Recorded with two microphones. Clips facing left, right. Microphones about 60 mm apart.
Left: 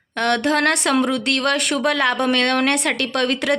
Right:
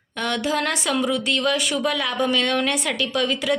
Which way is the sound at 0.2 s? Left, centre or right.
Left.